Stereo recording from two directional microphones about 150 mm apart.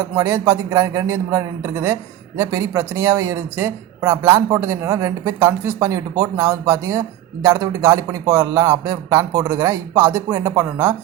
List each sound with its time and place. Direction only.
0.0 s a man's voice: 15° right (ahead or behind)